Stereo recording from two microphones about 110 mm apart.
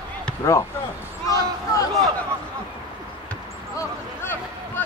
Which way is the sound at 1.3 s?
30° left (ahead or behind).